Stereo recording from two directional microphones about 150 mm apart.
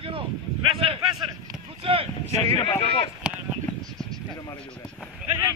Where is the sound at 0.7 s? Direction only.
40° right (ahead or behind).